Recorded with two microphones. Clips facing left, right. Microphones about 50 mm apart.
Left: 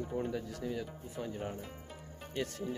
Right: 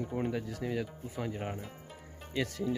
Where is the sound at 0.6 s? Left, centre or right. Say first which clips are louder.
Right 3 dB; right.